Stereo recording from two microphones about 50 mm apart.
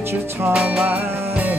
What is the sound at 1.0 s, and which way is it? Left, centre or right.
Music, right.